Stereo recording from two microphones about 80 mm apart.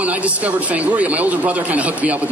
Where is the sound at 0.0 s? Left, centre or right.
Centre.